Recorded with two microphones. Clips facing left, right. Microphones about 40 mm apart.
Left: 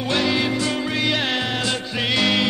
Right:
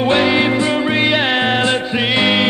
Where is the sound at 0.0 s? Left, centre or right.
Right.